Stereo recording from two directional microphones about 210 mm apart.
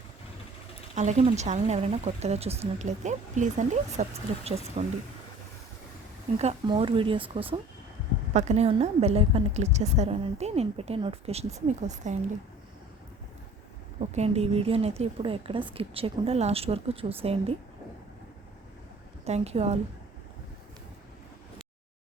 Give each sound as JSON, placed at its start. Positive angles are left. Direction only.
{"t": 0.9, "sound": "a woman's voice", "side_deg": -35}
{"t": 6.4, "sound": "a woman's voice", "side_deg": -30}
{"t": 14.0, "sound": "a woman's voice", "side_deg": -30}
{"t": 19.2, "sound": "a woman's voice", "side_deg": -30}